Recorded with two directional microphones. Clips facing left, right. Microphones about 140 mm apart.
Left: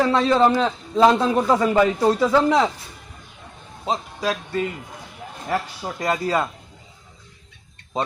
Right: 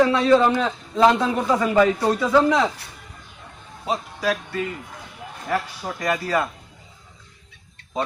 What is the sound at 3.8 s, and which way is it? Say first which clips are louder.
Speech: even; 30° left (ahead or behind).